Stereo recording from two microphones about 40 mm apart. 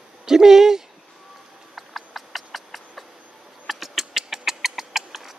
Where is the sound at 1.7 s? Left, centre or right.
Centre.